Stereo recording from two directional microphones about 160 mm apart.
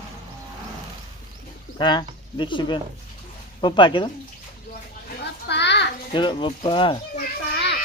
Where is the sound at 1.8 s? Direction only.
30° left (ahead or behind).